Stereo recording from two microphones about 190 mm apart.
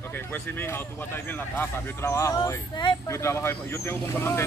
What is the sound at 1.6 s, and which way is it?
Speech, 15° left (ahead or behind).